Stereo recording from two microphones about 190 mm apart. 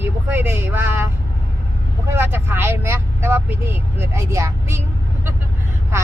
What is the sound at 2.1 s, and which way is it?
Speech, 10° right (ahead or behind).